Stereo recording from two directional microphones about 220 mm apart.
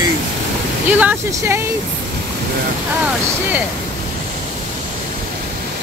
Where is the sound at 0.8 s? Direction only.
10° right (ahead or behind).